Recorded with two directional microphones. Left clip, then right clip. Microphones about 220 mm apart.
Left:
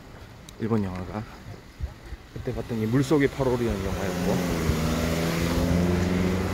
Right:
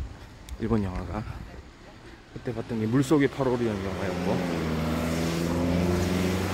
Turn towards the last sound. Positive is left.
turn(degrees=-15)  # may be behind; listen again after turning